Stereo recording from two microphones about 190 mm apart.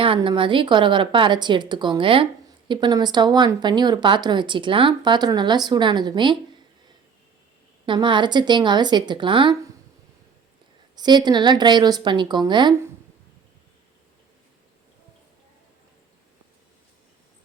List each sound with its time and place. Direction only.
0.0 s speech: 25° right (ahead or behind)
7.9 s speech: 25° right (ahead or behind)
10.9 s speech: 20° right (ahead or behind)